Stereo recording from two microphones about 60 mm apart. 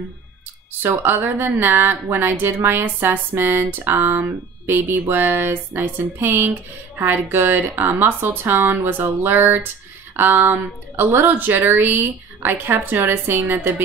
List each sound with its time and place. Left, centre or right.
0.8 s speech: right